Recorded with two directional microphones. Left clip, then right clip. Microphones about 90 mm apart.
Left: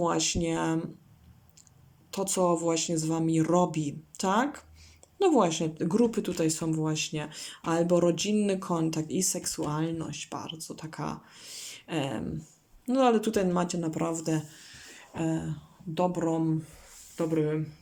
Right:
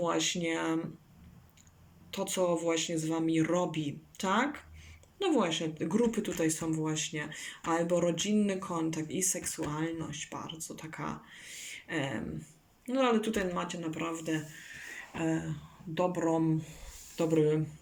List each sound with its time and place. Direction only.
0.0 s speech: 25° left (ahead or behind)
2.1 s speech: 30° left (ahead or behind)
14.8 s a sound: 25° left (ahead or behind)
16.1 s speech: 15° left (ahead or behind)
17.2 s speech: 5° left (ahead or behind)